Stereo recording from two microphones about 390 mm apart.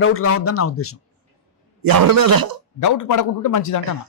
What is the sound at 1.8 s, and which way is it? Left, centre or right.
Speech, right.